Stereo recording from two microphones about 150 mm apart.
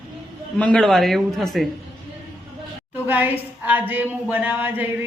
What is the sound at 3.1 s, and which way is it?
Speech, 10° right (ahead or behind).